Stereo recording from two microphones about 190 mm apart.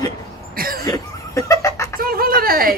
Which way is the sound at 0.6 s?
50° right (ahead or behind).